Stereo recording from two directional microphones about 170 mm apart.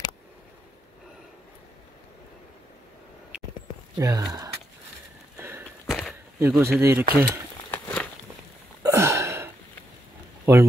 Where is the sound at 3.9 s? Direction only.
20° right (ahead or behind).